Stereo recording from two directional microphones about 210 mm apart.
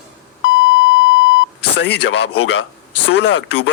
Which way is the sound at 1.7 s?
55° left (ahead or behind).